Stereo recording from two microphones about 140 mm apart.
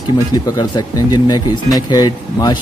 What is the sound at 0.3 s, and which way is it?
Speech, 30° left (ahead or behind).